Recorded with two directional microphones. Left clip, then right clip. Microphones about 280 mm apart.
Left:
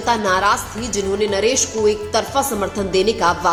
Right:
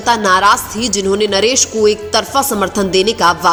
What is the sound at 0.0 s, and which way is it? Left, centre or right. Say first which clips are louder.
A woman's voice: right 6 dB; right.